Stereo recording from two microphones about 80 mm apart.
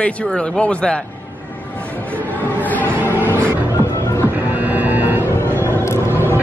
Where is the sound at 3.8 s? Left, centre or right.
Left.